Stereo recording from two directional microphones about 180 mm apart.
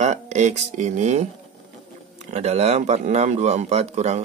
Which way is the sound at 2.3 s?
35° right (ahead or behind).